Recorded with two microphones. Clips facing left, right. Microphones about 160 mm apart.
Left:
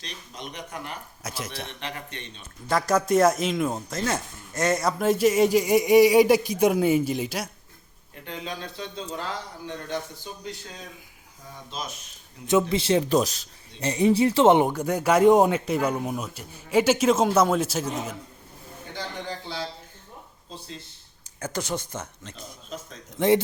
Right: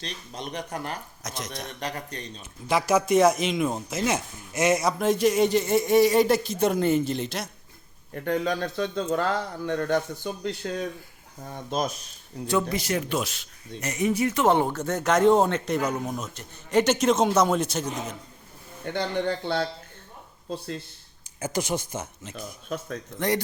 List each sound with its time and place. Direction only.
0.0 s speech: 35° right (ahead or behind)
1.2 s speech: 5° left (ahead or behind)
1.8 s speech: 40° right (ahead or behind)
2.6 s speech: 5° right (ahead or behind)
8.1 s speech: 50° right (ahead or behind)
12.5 s speech: 25° left (ahead or behind); by 18.2 s 5° left (ahead or behind)
18.9 s speech: 65° right (ahead or behind)
21.3 s speech: 10° right (ahead or behind)
22.4 s speech: 60° right (ahead or behind)